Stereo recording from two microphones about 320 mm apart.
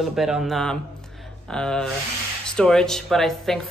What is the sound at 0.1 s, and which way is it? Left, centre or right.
Speech, centre.